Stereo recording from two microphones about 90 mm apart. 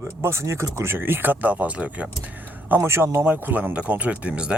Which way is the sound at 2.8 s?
30° right (ahead or behind).